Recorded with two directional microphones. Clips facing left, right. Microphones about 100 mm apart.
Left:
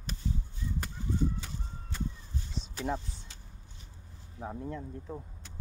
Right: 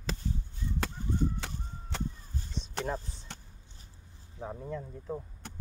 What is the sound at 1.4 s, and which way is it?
Fowl, 80° right.